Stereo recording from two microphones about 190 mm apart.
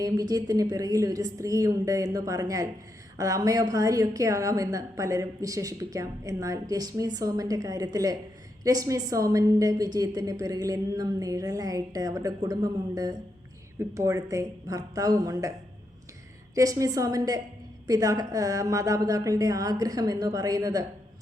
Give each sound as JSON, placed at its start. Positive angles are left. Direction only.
{"t": 0.0, "sound": "a woman's voice", "side_deg": -20}
{"t": 16.6, "sound": "a woman's voice", "side_deg": -20}